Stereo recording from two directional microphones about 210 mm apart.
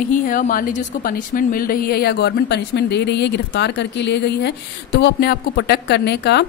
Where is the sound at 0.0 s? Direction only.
40° left (ahead or behind).